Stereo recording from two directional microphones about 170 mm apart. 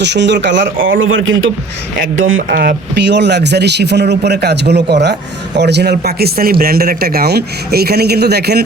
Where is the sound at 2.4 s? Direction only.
70° right (ahead or behind).